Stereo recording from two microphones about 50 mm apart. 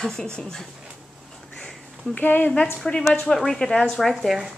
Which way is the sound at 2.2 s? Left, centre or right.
Left.